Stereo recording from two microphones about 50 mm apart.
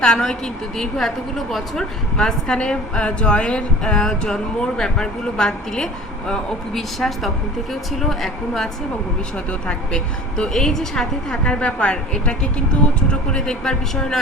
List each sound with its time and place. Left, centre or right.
0.0 s a woman's voice: centre
9.5 s speech: left
10.3 s a woman's voice: centre
11.4 s speech: left